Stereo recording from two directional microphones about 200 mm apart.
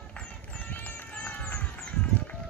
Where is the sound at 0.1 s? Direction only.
5° left (ahead or behind).